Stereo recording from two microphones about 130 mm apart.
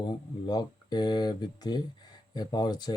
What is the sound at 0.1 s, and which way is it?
Speech, 35° left (ahead or behind).